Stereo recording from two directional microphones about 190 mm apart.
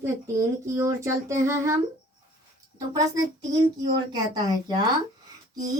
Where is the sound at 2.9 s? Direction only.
20° right (ahead or behind).